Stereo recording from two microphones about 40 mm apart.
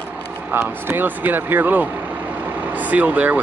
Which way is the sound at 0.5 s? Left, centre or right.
Right.